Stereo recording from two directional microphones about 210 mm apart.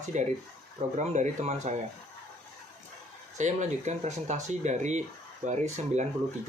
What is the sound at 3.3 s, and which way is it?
Speech, 35° right (ahead or behind).